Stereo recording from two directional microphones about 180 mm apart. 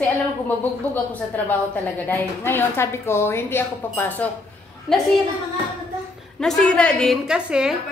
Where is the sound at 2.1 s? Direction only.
10° left (ahead or behind).